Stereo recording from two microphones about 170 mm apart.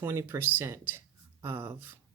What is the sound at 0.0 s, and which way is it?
Speech, 15° right (ahead or behind).